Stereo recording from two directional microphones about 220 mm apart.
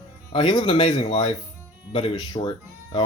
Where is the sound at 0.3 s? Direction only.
20° left (ahead or behind).